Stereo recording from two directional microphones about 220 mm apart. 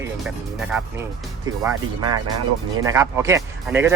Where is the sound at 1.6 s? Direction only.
20° right (ahead or behind).